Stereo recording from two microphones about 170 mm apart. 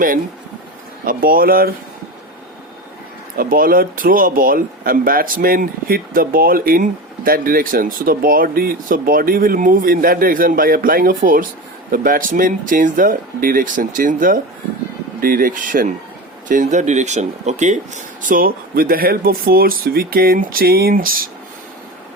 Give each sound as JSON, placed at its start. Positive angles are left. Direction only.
{"t": 1.0, "sound": "speech", "side_deg": -60}
{"t": 3.3, "sound": "speech", "side_deg": -55}